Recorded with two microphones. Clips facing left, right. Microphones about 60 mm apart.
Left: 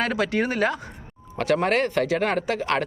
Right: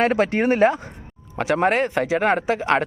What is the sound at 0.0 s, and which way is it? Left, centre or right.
Speech, right.